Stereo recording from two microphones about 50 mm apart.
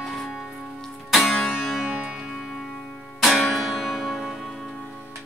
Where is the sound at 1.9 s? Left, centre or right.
Right.